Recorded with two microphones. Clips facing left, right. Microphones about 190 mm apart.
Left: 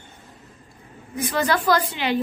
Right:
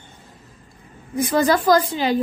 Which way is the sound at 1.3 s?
40° right (ahead or behind).